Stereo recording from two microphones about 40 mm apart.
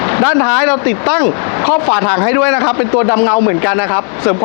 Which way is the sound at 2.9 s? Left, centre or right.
Left.